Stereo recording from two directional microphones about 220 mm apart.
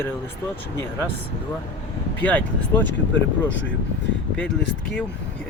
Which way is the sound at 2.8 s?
55° left (ahead or behind).